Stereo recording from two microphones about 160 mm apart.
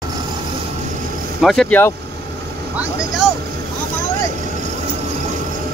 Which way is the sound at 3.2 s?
Centre (ahead or behind).